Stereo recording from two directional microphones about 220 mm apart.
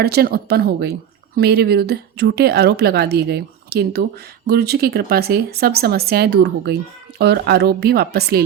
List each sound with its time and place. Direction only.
0.0 s a woman's voice: 45° right (ahead or behind)